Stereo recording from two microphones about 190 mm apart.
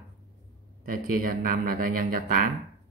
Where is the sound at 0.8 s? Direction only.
50° right (ahead or behind).